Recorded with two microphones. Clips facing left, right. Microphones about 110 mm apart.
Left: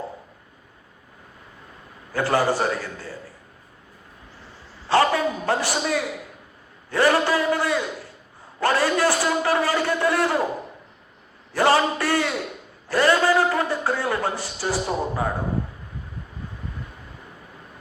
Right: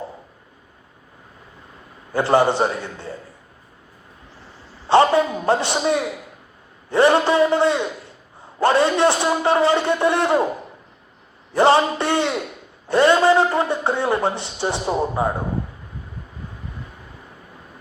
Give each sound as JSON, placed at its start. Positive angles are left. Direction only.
{"t": 2.1, "sound": "a man's voice", "side_deg": -25}
{"t": 4.9, "sound": "a sound", "side_deg": -25}
{"t": 6.9, "sound": "a man's voice", "side_deg": -25}
{"t": 11.5, "sound": "a man's voice", "side_deg": -25}